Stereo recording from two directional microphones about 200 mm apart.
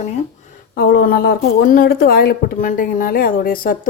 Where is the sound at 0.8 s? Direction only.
50° left (ahead or behind).